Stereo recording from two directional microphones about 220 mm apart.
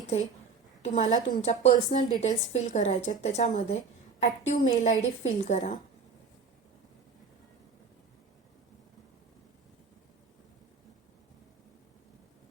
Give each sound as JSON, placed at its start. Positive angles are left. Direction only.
{"t": 0.8, "sound": "speech", "side_deg": 35}